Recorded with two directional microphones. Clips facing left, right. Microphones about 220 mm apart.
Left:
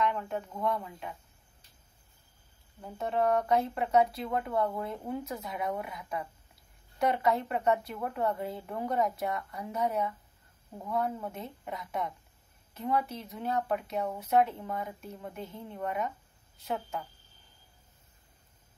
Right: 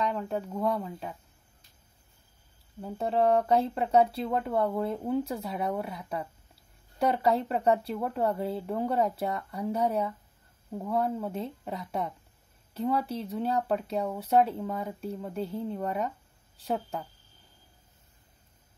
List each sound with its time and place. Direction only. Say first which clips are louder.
0.0 s speech: right 1 dB; 35° right (ahead or behind)
2.8 s speech: right 4 dB; 30° right (ahead or behind)